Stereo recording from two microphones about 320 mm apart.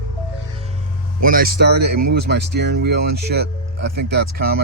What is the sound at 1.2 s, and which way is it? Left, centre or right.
Speech, right.